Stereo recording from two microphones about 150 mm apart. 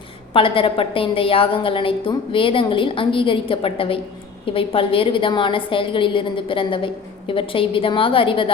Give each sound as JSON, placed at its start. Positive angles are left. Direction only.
{"t": 0.3, "sound": "a woman's voice", "side_deg": 35}